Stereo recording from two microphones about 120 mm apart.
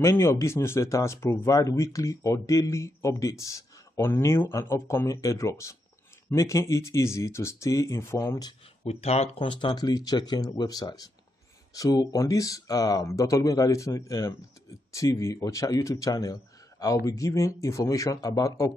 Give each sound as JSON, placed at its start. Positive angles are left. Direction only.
{"t": 0.0, "sound": "speech", "side_deg": 25}
{"t": 8.8, "sound": "speech", "side_deg": 60}